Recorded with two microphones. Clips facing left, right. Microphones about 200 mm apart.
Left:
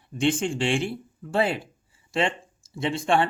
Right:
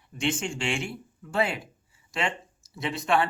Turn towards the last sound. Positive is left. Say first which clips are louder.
# left 3 dB
turn(degrees=30)  # may be behind; listen again after turning